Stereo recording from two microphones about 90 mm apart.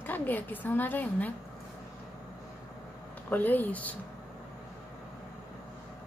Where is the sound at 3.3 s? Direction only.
20° left (ahead or behind).